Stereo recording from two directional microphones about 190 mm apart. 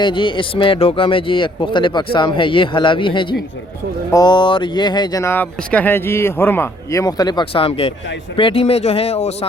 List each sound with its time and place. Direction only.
0.0 s speech: 25° left (ahead or behind)